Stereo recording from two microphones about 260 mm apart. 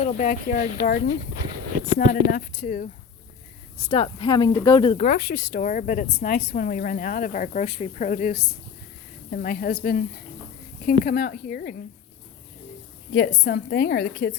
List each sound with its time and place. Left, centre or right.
0.0 s a woman's voice: left
13.1 s a woman's voice: left